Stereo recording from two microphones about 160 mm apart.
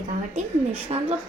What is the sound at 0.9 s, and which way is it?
Speech, 40° right (ahead or behind).